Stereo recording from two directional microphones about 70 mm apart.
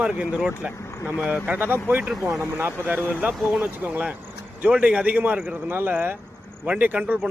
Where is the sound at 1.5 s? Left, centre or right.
Right.